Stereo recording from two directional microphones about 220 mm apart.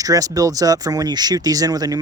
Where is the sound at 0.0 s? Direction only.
15° right (ahead or behind).